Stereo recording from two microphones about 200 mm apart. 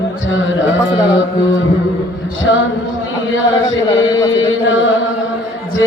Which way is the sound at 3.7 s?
75° left (ahead or behind).